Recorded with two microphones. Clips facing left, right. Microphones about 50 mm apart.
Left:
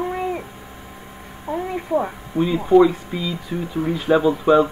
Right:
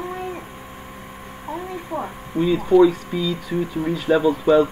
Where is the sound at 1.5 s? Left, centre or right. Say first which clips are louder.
Left 7 dB; centre.